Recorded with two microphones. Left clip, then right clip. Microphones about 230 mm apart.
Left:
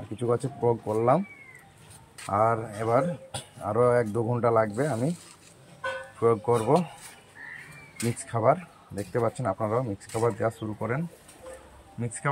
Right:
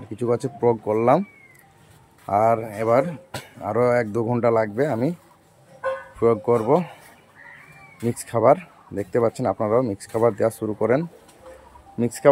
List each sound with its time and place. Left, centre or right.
0.2 s speech: centre
2.3 s speech: centre
6.1 s speech: centre
8.0 s speech: centre